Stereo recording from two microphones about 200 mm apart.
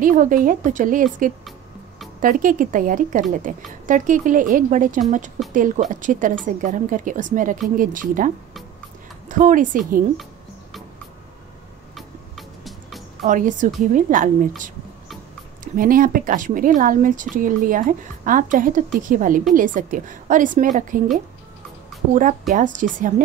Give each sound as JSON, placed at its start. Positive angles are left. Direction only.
{"t": 0.0, "sound": "a woman's voice", "side_deg": -40}
{"t": 9.3, "sound": "speech", "side_deg": -40}
{"t": 11.9, "sound": "music", "side_deg": 0}
{"t": 13.2, "sound": "speech", "side_deg": -40}
{"t": 15.6, "sound": "speech", "side_deg": -45}
{"t": 22.5, "sound": "speech", "side_deg": -40}